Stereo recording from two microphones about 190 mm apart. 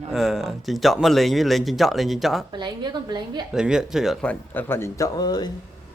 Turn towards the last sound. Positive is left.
turn(degrees=20)  # may be behind; listen again after turning